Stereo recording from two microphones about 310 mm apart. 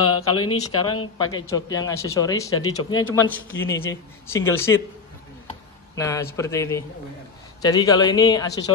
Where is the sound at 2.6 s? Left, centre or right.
Left.